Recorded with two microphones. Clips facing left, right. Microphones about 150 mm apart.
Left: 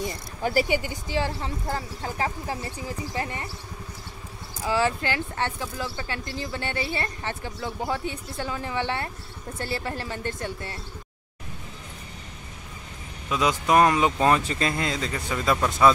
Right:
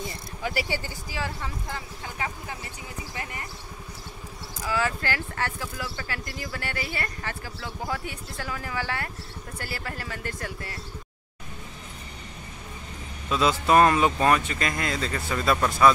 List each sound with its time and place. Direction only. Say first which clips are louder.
0.4 s speech: left 6 dB; 40° left (ahead or behind)
0.7 s speech: left 6 dB; 20° left (ahead or behind)
1.1 s speech: left 6 dB; 30° left (ahead or behind)
4.6 s speech: left 3 dB; 30° left (ahead or behind)
13.3 s speech: right 1 dB; 15° left (ahead or behind)